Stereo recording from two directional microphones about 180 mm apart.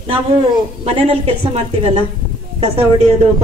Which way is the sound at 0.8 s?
35° right (ahead or behind).